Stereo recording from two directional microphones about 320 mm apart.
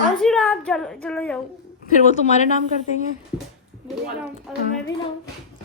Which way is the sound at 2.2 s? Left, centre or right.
Left.